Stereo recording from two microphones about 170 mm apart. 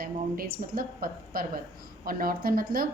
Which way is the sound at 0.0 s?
60° right (ahead or behind).